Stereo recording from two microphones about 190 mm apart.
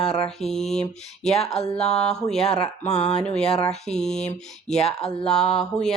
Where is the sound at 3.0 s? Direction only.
5° left (ahead or behind).